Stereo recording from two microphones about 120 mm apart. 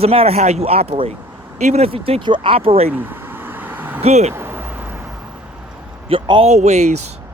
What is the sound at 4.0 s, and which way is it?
Speech, 65° right (ahead or behind).